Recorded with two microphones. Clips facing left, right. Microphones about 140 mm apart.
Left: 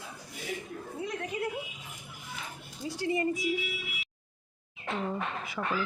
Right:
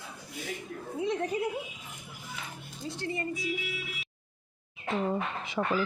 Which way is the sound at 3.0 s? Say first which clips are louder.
Left 5 dB; 15° left (ahead or behind).